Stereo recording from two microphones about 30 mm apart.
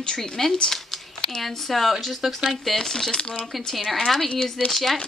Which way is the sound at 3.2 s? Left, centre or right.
Left.